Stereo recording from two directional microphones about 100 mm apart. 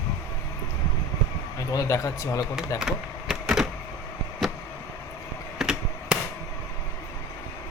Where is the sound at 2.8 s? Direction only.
5° right (ahead or behind).